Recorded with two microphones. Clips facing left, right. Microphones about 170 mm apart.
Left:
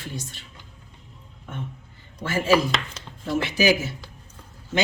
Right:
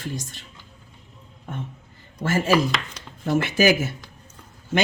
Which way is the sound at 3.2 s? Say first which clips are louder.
Right 2 dB; 50° right (ahead or behind).